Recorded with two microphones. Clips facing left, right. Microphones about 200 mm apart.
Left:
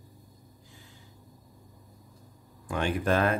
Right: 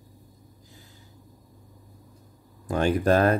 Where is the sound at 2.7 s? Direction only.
40° right (ahead or behind).